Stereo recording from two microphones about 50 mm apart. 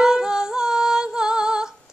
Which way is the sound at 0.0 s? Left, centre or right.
Centre.